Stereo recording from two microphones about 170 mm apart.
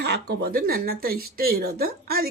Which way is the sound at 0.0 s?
70° right (ahead or behind).